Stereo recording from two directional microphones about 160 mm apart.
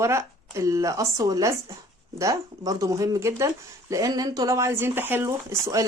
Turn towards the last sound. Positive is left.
turn(degrees=-20)  # may be behind; listen again after turning